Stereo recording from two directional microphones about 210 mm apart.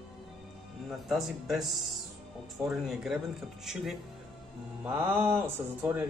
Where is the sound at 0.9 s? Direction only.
Centre (ahead or behind).